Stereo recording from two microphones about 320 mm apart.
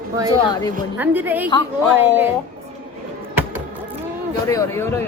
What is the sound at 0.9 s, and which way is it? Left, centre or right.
A woman's voice, centre.